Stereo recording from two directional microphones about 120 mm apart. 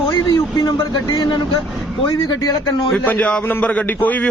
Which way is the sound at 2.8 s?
15° left (ahead or behind).